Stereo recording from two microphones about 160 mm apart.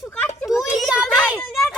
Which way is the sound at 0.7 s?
Centre (ahead or behind).